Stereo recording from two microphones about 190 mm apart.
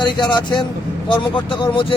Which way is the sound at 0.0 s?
25° left (ahead or behind).